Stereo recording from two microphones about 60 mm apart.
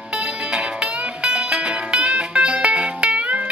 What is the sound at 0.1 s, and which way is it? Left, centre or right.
Music, centre.